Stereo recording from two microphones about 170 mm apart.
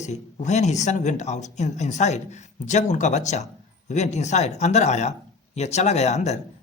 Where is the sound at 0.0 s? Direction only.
45° left (ahead or behind).